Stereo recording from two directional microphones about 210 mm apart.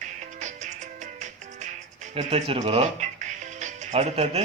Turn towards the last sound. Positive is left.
turn(degrees=-30)  # may be behind; listen again after turning